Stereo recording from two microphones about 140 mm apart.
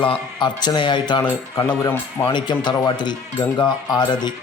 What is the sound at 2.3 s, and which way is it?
A man's voice, 35° left (ahead or behind).